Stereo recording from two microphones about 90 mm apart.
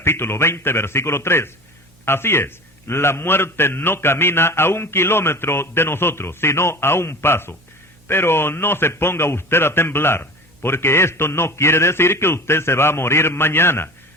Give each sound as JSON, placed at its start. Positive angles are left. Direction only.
{"t": 0.0, "sound": "a man's voice", "side_deg": 25}